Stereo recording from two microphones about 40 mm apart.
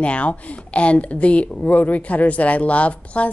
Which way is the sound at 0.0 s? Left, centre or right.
Left.